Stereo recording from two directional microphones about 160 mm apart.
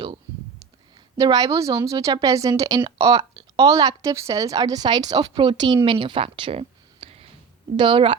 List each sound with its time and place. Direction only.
1.1 s a woman's voice: 25° right (ahead or behind)